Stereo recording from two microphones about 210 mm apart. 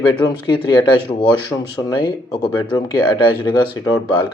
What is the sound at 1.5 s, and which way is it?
Speech, 20° left (ahead or behind).